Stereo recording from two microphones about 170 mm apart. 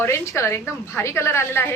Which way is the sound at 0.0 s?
15° left (ahead or behind).